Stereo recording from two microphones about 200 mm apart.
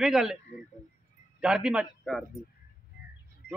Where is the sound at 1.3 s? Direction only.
5° right (ahead or behind).